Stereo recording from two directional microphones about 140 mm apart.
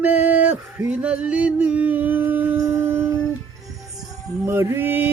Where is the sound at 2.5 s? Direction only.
20° right (ahead or behind).